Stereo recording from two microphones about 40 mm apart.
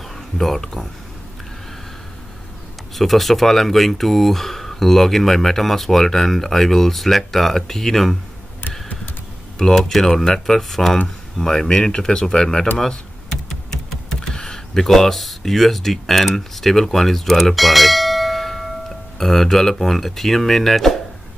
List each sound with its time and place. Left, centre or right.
0.4 s speech: centre
3.0 s speech: centre
9.6 s speech: centre
12.7 s typing: centre
14.3 s speech: centre